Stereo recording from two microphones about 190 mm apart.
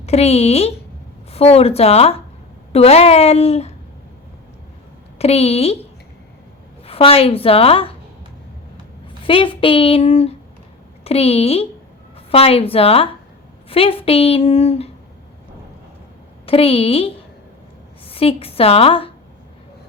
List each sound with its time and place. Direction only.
0.0 s speech: 35° left (ahead or behind)
5.1 s speech: 35° left (ahead or behind)
6.8 s a woman's voice: 30° left (ahead or behind)
9.2 s a woman's voice: 25° left (ahead or behind)
16.5 s a woman's voice: 30° left (ahead or behind)